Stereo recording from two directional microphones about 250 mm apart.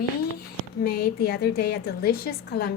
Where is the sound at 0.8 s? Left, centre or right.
Left.